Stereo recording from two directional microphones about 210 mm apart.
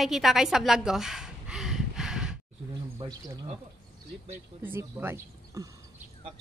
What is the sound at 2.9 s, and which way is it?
Speech, 20° right (ahead or behind).